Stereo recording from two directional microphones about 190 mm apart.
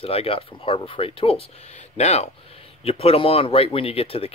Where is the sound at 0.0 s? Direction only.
30° left (ahead or behind).